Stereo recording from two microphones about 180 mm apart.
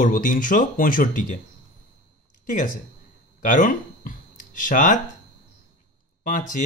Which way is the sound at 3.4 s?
50° left (ahead or behind).